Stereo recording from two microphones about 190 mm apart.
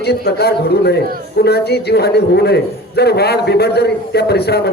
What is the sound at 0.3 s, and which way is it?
A man's voice, 60° left (ahead or behind).